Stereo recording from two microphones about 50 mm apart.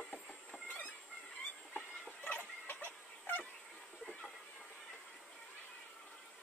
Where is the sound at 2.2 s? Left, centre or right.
Left.